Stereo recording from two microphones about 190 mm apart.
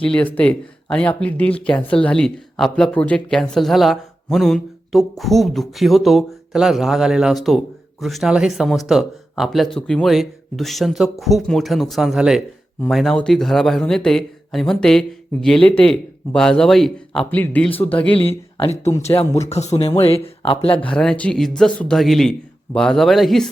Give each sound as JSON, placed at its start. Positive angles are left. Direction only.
{"t": 0.0, "sound": "speech", "side_deg": 5}
{"t": 18.2, "sound": "speech", "side_deg": 30}
{"t": 18.9, "sound": "speech", "side_deg": 15}
{"t": 19.1, "sound": "speech", "side_deg": 35}
{"t": 20.8, "sound": "speech", "side_deg": 5}